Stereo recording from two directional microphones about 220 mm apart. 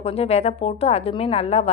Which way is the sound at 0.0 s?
25° left (ahead or behind).